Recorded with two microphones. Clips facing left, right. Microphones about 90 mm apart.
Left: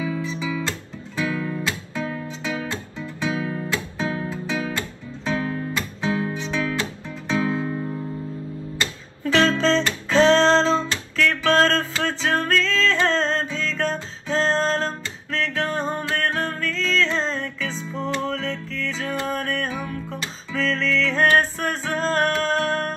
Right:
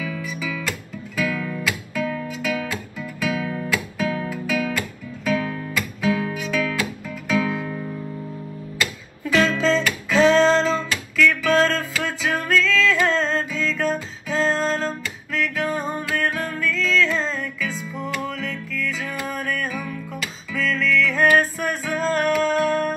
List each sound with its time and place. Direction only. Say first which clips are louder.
0.0 s guitar: left 2 dB; 30° left (ahead or behind)
2.2 s music: right 2 dB; 30° left (ahead or behind)